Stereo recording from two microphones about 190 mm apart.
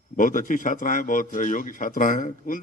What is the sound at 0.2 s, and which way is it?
A man's voice, 45° left (ahead or behind).